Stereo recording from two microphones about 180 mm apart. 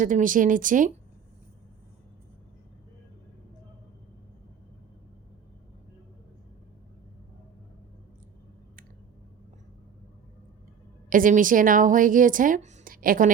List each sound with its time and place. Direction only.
0.0 s a woman's voice: 45° right (ahead or behind)
11.1 s a woman's voice: 50° right (ahead or behind)